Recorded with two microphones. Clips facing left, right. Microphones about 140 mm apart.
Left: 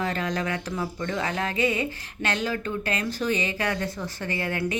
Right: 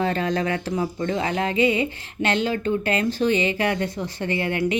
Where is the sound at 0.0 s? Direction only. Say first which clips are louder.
Right 5 dB; 30° right (ahead or behind).